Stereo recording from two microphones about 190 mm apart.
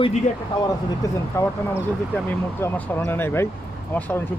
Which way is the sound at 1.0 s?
15° left (ahead or behind).